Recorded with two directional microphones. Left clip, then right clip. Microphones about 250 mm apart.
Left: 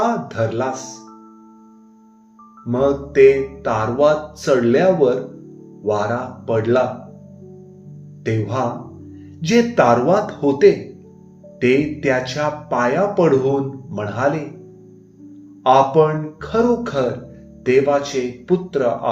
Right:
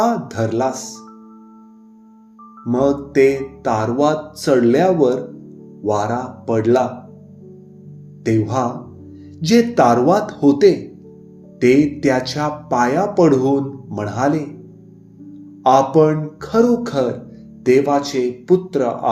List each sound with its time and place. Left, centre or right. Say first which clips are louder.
0.0 s speech: right 1 dB; right
2.6 s music: right 1 dB; right
8.2 s music: right 3 dB; right
11.6 s music: right 3 dB; right
15.6 s music: right 1 dB; right